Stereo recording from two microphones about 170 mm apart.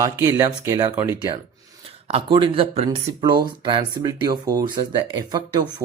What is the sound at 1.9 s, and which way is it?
Speech, 35° right (ahead or behind).